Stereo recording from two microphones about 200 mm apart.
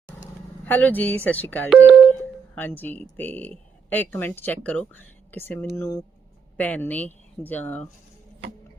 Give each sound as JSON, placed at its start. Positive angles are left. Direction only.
{"t": 0.6, "sound": "speech", "side_deg": 10}
{"t": 1.7, "sound": "telephone dialing", "side_deg": 0}
{"t": 2.6, "sound": "speech", "side_deg": 10}